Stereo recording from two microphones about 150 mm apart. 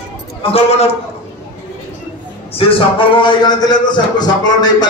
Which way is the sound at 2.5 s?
40° left (ahead or behind).